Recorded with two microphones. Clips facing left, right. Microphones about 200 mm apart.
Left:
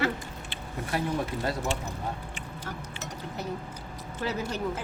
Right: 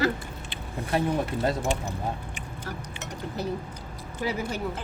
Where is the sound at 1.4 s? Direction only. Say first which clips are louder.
Right 4 dB; 25° right (ahead or behind).